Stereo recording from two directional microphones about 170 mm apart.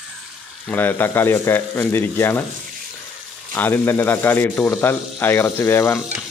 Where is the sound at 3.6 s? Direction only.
10° left (ahead or behind).